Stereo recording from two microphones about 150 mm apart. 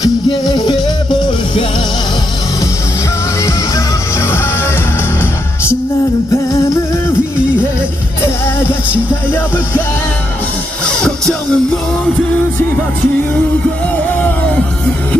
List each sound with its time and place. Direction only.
0.0 s music: 25° left (ahead or behind)
3.4 s music: 20° left (ahead or behind)
11.0 s music: 5° left (ahead or behind)
14.1 s music: 10° left (ahead or behind)